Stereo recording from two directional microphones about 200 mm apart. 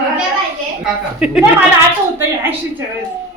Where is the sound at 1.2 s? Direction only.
5° right (ahead or behind).